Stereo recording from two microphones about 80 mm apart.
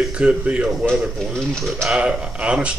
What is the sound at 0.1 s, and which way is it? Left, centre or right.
Speech, centre.